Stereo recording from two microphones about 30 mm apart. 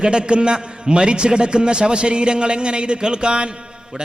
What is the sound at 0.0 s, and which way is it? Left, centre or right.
A man's voice, right.